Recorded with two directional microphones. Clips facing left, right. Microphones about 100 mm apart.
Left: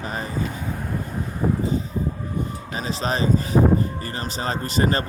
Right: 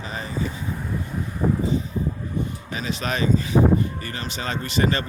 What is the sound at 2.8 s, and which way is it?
Speech, 35° left (ahead or behind).